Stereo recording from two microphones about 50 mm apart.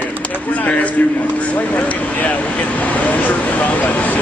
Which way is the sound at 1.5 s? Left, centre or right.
Left.